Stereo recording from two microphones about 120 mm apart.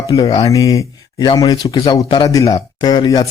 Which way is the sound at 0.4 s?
30° left (ahead or behind).